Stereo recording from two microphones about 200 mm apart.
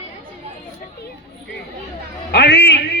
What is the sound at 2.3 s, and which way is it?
Speech, 55° left (ahead or behind).